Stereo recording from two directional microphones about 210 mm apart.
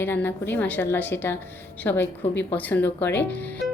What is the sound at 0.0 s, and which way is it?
A woman's voice, 10° left (ahead or behind).